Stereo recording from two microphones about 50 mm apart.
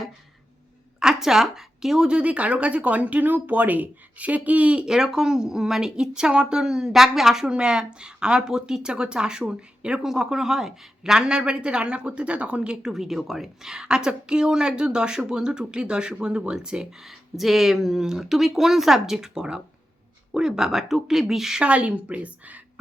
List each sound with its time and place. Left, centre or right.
0.9 s a sound: centre
2.0 s speech: right
4.9 s a woman's voice: centre
21.6 s speech: right